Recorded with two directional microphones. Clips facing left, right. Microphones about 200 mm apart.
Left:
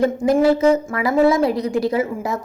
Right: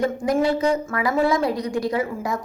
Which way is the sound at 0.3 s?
25° left (ahead or behind).